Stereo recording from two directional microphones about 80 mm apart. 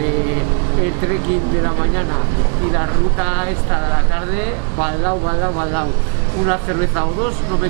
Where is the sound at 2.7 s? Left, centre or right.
Centre.